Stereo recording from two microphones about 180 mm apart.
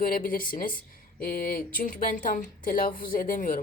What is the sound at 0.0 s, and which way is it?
Speech, 50° left (ahead or behind).